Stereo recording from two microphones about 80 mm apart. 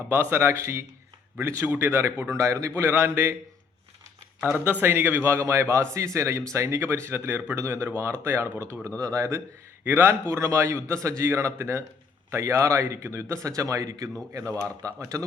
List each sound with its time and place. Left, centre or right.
0.1 s a man's voice: right
2.8 s a man's voice: right
4.5 s a man's voice: right
7.5 s a man's voice: right
9.8 s a man's voice: right